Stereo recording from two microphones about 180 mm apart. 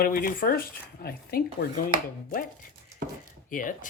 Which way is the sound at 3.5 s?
50° left (ahead or behind).